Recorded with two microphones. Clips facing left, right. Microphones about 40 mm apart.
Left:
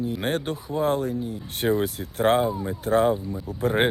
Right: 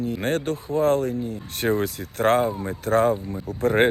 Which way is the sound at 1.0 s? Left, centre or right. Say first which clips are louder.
Right 2 dB; right.